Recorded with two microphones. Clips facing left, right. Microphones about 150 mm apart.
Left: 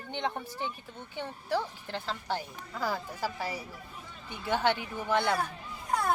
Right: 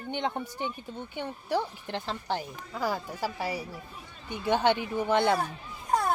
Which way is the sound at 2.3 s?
15° right (ahead or behind).